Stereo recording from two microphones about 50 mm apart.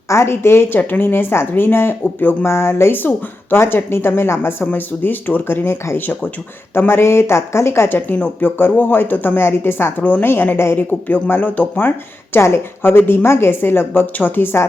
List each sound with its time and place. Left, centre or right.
0.1 s a woman's voice: left
0.8 s speech: left
5.0 s a woman's voice: left
8.4 s speech: left
9.4 s speech: left